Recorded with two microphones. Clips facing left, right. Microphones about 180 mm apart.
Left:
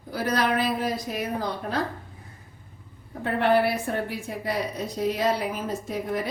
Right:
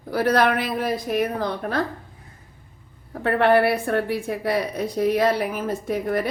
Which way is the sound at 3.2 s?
65° right (ahead or behind).